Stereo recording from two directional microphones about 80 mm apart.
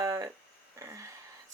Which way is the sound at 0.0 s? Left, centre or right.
Right.